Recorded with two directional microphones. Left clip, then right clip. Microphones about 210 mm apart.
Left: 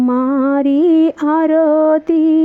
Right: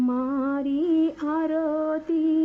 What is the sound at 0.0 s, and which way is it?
Music, 40° left (ahead or behind).